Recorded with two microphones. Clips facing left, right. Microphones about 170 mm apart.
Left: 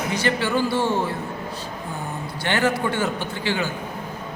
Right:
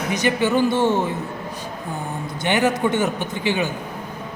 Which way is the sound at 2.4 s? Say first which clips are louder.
Right 3 dB; 20° right (ahead or behind).